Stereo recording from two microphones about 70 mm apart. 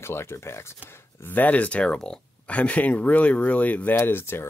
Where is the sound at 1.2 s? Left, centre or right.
Left.